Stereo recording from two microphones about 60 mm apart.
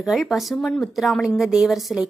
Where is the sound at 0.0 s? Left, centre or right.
Centre.